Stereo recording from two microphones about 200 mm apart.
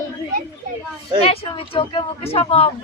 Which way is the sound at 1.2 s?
30° left (ahead or behind).